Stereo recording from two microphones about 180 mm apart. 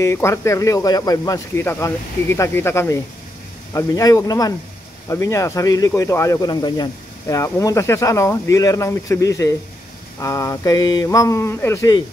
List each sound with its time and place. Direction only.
0.0 s speech: 15° left (ahead or behind)